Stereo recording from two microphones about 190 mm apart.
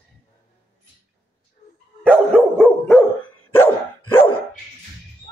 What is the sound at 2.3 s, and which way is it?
Dog, centre (ahead or behind).